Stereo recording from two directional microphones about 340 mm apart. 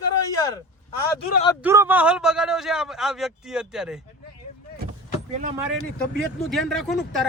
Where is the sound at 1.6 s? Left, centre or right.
Centre.